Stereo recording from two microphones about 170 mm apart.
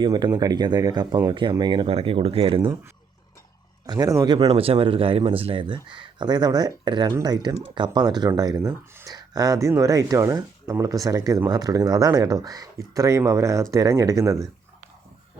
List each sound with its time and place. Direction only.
0.0 s speech: 25° right (ahead or behind)
3.8 s a man's voice: 20° right (ahead or behind)